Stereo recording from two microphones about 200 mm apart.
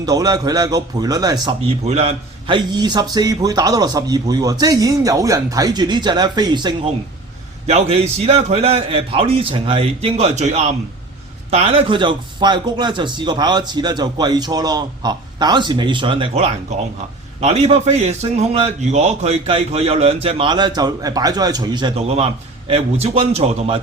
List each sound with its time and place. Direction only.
0.0 s a man's voice: 20° right (ahead or behind)
1.6 s a man's voice: 30° right (ahead or behind)